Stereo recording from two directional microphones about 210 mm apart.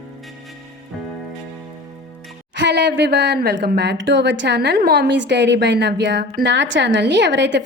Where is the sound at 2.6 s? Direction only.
55° right (ahead or behind).